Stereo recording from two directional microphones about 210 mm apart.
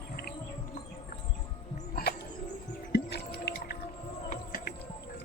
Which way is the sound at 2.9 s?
50° left (ahead or behind).